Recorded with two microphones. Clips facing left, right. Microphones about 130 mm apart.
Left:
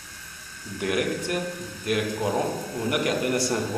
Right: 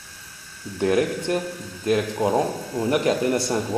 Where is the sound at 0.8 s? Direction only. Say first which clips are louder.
Right 5 dB; 30° right (ahead or behind).